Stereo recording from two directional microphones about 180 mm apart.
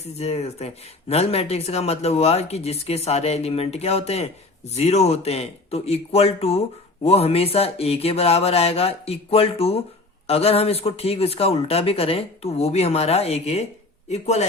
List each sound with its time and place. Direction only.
0.0 s speech: 35° left (ahead or behind)